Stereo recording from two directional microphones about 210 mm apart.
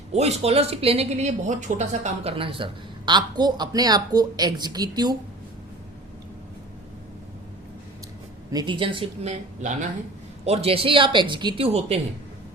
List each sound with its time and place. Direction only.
0.1 s a woman's voice: 30° right (ahead or behind)
8.4 s a woman's voice: 20° right (ahead or behind)